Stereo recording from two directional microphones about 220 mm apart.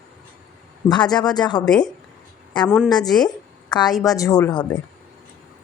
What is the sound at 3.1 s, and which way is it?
Speech, centre (ahead or behind).